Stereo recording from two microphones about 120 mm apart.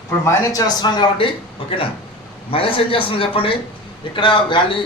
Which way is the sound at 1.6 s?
50° left (ahead or behind).